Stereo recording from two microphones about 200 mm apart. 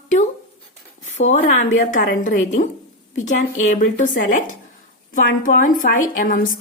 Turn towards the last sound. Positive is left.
turn(degrees=40)  # may be behind; listen again after turning